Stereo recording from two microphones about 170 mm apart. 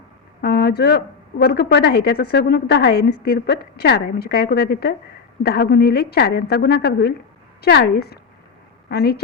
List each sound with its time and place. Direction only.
0.4 s a woman's voice: 70° left (ahead or behind)